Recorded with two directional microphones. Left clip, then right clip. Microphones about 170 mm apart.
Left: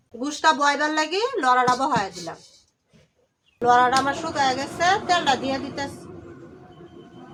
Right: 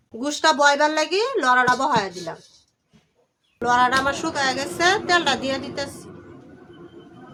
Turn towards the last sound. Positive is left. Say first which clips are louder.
# right 1 dB
turn(degrees=-55)  # may be behind; listen again after turning